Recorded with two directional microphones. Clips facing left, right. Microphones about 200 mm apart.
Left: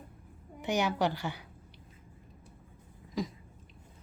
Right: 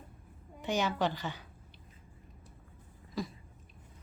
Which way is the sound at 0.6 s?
15° left (ahead or behind).